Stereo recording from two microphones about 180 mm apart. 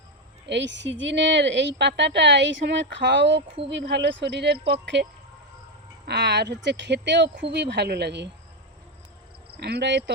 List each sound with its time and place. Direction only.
0.4 s a woman's voice: 80° right
6.1 s a woman's voice: 65° right (ahead or behind)
9.5 s speech: 65° right (ahead or behind)